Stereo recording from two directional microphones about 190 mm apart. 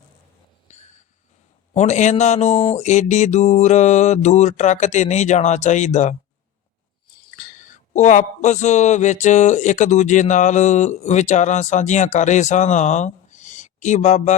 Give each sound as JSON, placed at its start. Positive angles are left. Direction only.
{"t": 0.7, "sound": "a sound", "side_deg": 40}
{"t": 1.7, "sound": "a man's voice", "side_deg": 35}
{"t": 7.3, "sound": "a man's voice", "side_deg": 40}